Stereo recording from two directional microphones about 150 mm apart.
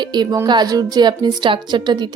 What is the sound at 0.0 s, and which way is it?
A woman's voice, 30° right (ahead or behind).